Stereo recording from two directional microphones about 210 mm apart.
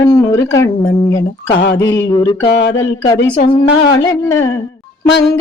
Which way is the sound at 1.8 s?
15° left (ahead or behind).